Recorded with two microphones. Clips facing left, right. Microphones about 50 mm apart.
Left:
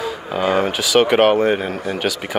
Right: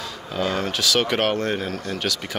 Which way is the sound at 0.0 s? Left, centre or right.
Centre.